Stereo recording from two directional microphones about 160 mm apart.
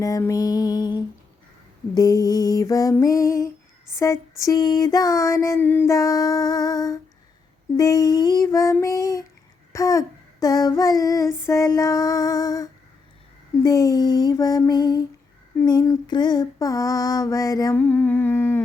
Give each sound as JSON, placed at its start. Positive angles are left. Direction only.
{"t": 0.0, "sound": "female singing", "side_deg": 20}